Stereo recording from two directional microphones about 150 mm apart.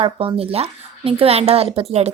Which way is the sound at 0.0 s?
35° right (ahead or behind).